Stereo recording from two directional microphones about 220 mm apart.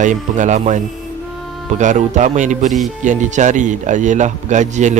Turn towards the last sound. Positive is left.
turn(degrees=-35)  # may be behind; listen again after turning